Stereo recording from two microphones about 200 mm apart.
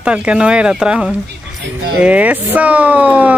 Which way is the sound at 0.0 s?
5° right (ahead or behind).